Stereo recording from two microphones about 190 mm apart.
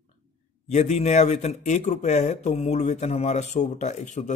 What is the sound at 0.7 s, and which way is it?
Speech, 35° left (ahead or behind).